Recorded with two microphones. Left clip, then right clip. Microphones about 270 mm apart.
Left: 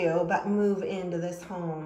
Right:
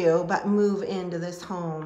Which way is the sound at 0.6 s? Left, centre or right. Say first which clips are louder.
Right 2 dB; right.